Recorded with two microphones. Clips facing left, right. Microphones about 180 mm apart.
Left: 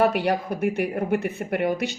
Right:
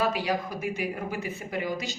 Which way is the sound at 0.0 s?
65° left (ahead or behind).